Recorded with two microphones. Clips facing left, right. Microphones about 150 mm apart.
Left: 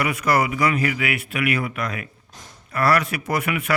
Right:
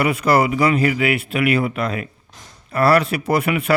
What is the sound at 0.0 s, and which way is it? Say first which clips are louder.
A man's voice: right 4 dB; 30° right (ahead or behind).